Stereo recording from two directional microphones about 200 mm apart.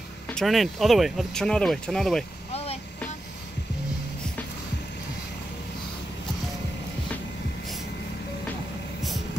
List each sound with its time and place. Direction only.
0.3 s speech: centre (ahead or behind)
2.5 s vehicle: 30° left (ahead or behind)